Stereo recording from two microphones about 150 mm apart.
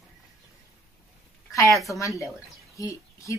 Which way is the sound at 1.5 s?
20° left (ahead or behind).